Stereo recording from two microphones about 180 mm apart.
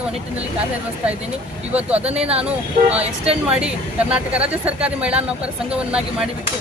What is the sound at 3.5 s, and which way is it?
Speech, 5° right (ahead or behind).